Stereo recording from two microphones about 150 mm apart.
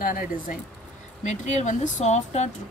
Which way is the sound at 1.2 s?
55° left (ahead or behind).